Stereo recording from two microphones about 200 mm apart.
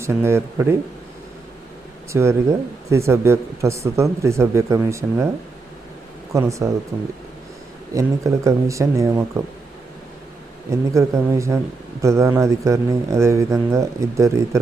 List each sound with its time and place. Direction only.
0.0 s speech: 10° right (ahead or behind)
2.1 s speech: 15° right (ahead or behind)
6.3 s speech: 15° right (ahead or behind)
7.9 s speech: 15° right (ahead or behind)
10.7 s speech: 15° right (ahead or behind)